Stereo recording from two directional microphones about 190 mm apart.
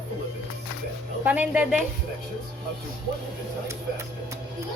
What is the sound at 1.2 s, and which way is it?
Speech, 10° right (ahead or behind).